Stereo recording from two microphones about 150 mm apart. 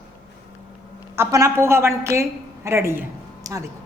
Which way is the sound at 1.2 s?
20° right (ahead or behind).